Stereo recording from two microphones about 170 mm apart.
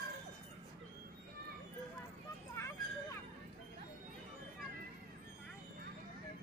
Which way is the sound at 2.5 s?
15° left (ahead or behind).